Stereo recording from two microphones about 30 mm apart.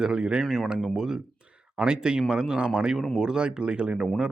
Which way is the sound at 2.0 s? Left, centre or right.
Right.